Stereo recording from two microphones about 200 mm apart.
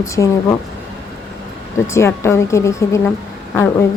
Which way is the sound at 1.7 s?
15° left (ahead or behind).